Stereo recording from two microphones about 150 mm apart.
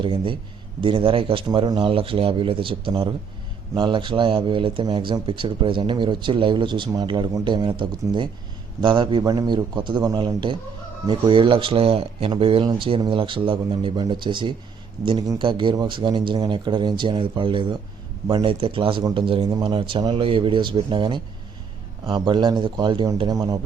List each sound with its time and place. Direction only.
0.0 s a man's voice: 35° right (ahead or behind)